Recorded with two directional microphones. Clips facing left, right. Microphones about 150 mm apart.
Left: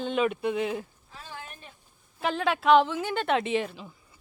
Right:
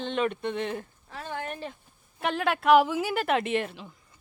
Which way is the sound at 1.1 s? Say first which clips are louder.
Right 8 dB; 60° right (ahead or behind).